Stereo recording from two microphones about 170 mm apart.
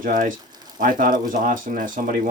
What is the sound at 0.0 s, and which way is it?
Speech, 55° right (ahead or behind).